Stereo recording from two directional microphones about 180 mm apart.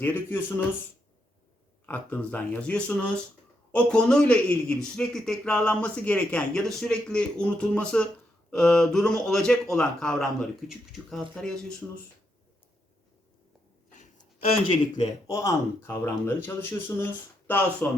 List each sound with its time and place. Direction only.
0.0 s speech: 10° left (ahead or behind)
1.9 s speech: 10° left (ahead or behind)
13.9 s a sound: 45° left (ahead or behind)
14.7 s a man's voice: 35° left (ahead or behind)
15.3 s speech: 15° left (ahead or behind)